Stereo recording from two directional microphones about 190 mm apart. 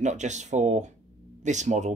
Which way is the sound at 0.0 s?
40° right (ahead or behind).